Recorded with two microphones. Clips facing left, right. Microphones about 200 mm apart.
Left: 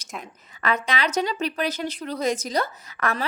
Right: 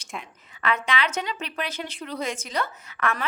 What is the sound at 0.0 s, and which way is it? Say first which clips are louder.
A woman's voice: left 1 dB; 40° left (ahead or behind).